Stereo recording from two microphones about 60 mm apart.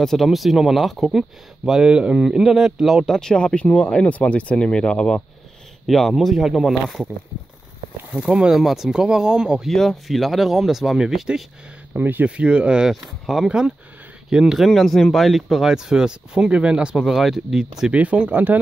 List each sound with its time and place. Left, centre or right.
0.0 s speech: centre
3.1 s speech: centre
5.9 s speech: centre
8.3 s speech: centre
8.5 s speech: centre
9.7 s speech: centre
11.9 s speech: right
12.3 s speech: centre
14.7 s speech: centre
17.9 s speech: right